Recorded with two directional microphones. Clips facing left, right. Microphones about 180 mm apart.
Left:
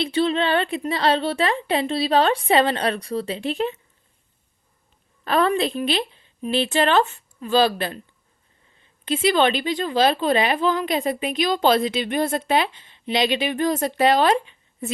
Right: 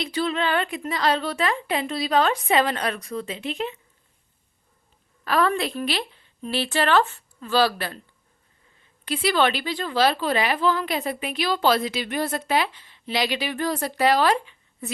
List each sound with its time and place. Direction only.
0.0 s a woman's voice: 25° left (ahead or behind)
5.2 s a woman's voice: 25° left (ahead or behind)
9.0 s a woman's voice: 25° left (ahead or behind)